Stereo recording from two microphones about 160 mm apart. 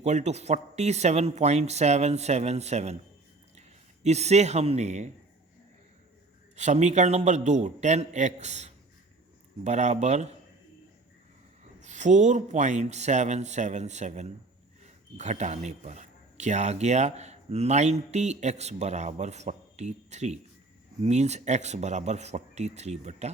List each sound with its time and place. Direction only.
0.0 s speech: 45° right (ahead or behind)
4.0 s speech: 45° right (ahead or behind)
6.6 s speech: 45° right (ahead or behind)
11.8 s speech: 50° right (ahead or behind)